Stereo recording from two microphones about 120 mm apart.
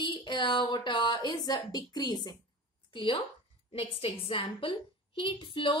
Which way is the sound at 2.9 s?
45° left (ahead or behind).